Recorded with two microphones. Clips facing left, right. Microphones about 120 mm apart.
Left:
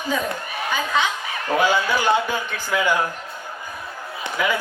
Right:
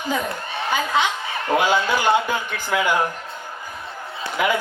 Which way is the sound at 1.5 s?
20° right (ahead or behind).